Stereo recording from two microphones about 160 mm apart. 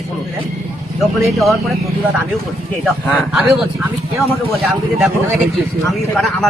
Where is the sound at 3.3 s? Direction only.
5° right (ahead or behind).